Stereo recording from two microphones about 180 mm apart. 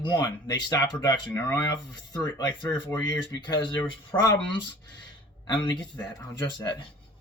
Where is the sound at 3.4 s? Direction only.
25° left (ahead or behind).